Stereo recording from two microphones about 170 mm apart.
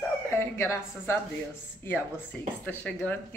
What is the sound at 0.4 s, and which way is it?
Speech, 15° left (ahead or behind).